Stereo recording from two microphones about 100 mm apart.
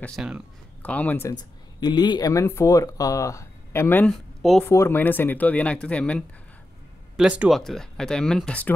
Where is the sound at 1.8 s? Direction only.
45° left (ahead or behind).